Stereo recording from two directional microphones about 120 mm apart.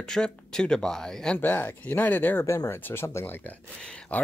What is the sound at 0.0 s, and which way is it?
Speech, 5° left (ahead or behind).